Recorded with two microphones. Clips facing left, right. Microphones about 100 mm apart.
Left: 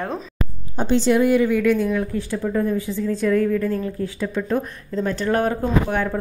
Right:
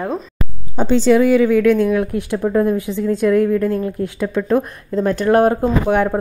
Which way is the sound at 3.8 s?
65° right (ahead or behind).